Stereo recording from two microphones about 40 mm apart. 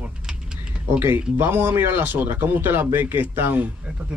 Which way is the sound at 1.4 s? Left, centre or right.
Right.